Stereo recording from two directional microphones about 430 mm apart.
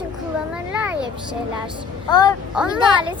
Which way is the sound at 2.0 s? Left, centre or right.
Centre.